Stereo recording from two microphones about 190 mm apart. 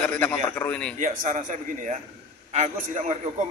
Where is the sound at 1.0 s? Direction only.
40° right (ahead or behind).